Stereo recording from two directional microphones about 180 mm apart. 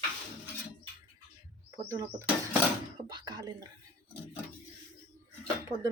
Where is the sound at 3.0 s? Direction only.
25° right (ahead or behind).